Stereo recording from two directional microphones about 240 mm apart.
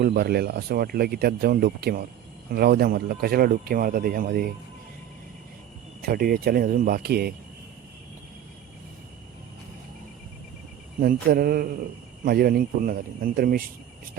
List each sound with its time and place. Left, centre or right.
0.0 s speech: right
6.0 s speech: right
11.0 s speech: right